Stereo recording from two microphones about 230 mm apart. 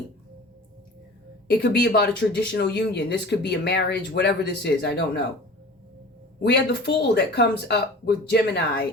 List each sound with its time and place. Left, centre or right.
1.6 s speech: left
6.4 s speech: left